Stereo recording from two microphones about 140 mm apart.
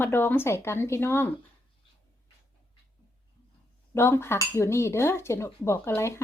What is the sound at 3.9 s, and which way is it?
Cutlery, 20° left (ahead or behind).